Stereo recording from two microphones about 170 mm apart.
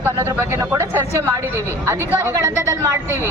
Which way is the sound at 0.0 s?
15° right (ahead or behind).